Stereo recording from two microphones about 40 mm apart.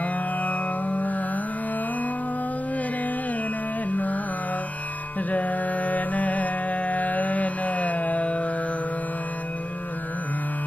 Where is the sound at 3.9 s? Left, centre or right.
Left.